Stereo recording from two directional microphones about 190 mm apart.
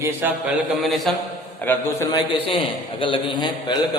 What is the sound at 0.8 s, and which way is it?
Speech, centre (ahead or behind).